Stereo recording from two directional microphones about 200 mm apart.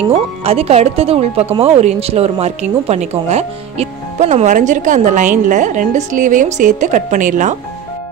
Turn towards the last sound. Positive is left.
turn(degrees=-40)  # may be behind; listen again after turning